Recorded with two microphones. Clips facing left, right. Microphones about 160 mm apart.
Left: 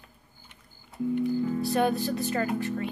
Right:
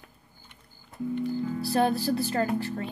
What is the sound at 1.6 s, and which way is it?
A child's voice, 35° right (ahead or behind).